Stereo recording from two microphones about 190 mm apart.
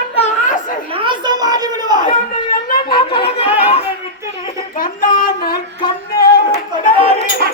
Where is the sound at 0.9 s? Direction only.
25° right (ahead or behind).